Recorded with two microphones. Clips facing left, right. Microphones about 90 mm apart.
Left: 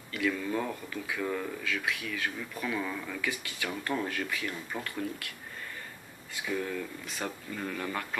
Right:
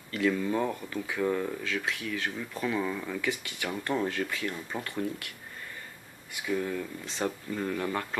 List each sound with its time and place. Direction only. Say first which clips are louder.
0.1 s speech: right 3 dB; 30° right (ahead or behind)
6.3 s speech: right 2 dB; 25° right (ahead or behind)